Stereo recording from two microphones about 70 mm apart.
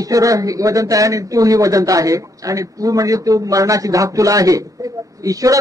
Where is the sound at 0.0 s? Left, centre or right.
Right.